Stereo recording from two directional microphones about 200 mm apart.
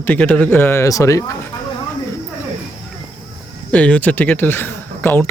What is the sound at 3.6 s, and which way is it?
Speech, 5° left (ahead or behind).